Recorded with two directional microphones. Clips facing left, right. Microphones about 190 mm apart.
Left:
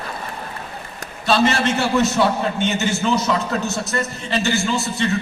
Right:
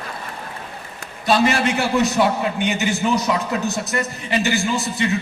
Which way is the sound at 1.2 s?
15° right (ahead or behind).